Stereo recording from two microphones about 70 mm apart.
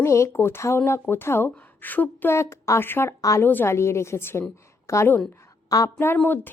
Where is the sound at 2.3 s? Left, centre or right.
Left.